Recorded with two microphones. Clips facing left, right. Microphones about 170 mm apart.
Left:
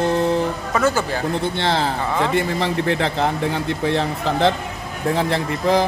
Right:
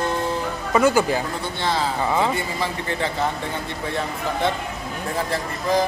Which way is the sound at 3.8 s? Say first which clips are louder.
Left 5 dB; 90° left.